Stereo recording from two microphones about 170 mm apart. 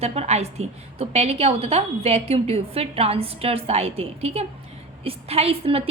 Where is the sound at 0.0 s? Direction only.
40° right (ahead or behind).